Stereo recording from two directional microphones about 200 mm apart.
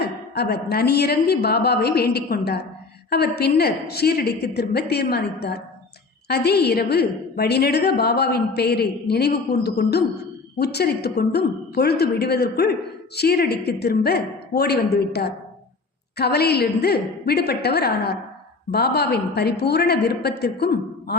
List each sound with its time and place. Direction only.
0.3 s a woman's voice: 55° left (ahead or behind)